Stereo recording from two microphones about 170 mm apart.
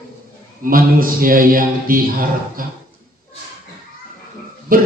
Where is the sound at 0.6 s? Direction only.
55° right (ahead or behind).